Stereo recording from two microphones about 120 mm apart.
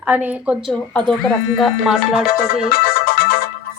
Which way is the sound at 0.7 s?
5° left (ahead or behind).